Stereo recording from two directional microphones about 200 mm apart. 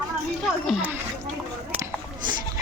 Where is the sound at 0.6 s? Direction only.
10° right (ahead or behind).